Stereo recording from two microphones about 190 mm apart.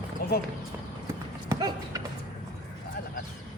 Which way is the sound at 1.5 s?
20° right (ahead or behind).